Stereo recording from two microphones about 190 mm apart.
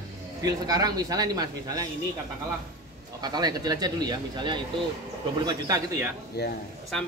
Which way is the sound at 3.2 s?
20° right (ahead or behind).